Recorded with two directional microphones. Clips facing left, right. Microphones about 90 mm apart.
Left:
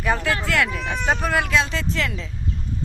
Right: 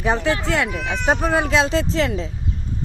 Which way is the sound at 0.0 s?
20° right (ahead or behind).